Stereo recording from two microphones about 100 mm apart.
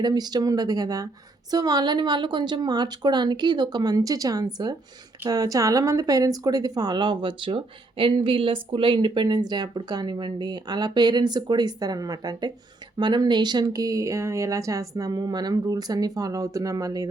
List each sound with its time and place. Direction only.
0.0 s speech: 45° right (ahead or behind)